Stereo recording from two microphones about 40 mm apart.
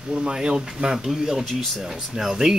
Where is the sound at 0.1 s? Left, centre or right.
Right.